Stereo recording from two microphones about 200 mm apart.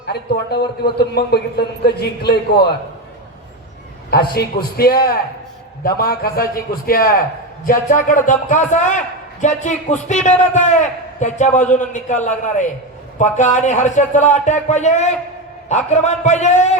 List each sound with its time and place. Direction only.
0.1 s a man's voice: 55° left (ahead or behind)
4.1 s a man's voice: 50° left (ahead or behind); by 16.7 s 35° left (ahead or behind)